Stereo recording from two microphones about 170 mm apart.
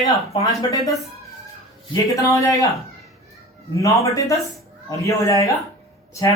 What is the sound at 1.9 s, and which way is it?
Speech, 20° left (ahead or behind).